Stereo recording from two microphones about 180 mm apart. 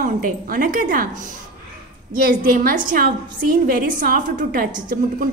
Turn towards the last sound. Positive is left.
turn(degrees=-50)  # may be behind; listen again after turning